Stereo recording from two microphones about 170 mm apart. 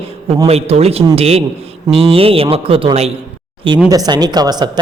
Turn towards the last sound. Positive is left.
turn(degrees=-25)  # may be behind; listen again after turning